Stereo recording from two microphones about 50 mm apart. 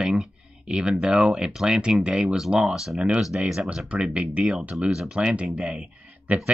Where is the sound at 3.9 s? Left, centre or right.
Right.